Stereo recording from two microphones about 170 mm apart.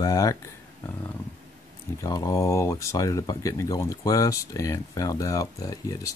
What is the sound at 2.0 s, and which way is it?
Speech, 20° left (ahead or behind).